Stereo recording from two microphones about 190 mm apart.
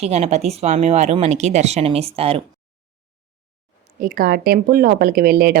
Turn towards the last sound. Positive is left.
turn(degrees=-50)  # may be behind; listen again after turning